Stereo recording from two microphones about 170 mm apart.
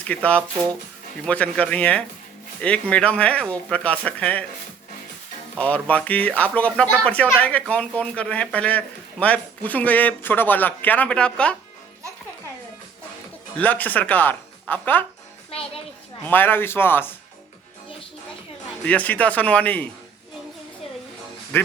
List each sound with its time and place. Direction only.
0.1 s speech: 10° left (ahead or behind)
5.5 s speech: 10° left (ahead or behind)
13.6 s speech: 10° left (ahead or behind)
15.4 s music: 35° left (ahead or behind)
16.2 s speech: 10° left (ahead or behind)
18.9 s speech: 10° left (ahead or behind)
21.5 s speech: 10° left (ahead or behind)